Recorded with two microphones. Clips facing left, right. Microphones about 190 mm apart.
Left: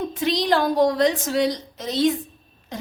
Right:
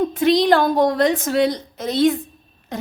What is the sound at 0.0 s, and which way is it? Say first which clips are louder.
A woman's voice: right 7 dB; 55° right (ahead or behind).